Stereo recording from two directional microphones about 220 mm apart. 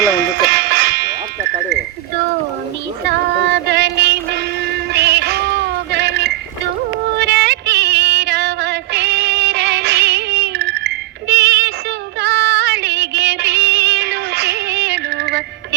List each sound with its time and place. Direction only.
0.2 s music: 55° right (ahead or behind)
3.0 s music: 50° right (ahead or behind)